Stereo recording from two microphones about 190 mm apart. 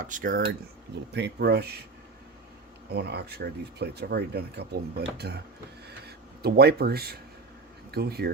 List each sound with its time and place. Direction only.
0.0 s speech: 45° right (ahead or behind)
1.1 s speech: 60° right (ahead or behind)
2.9 s speech: 60° right (ahead or behind)